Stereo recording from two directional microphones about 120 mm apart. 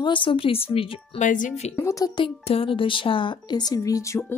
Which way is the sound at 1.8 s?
25° left (ahead or behind).